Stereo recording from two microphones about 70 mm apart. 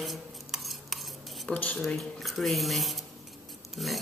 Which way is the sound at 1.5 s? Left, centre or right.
Left.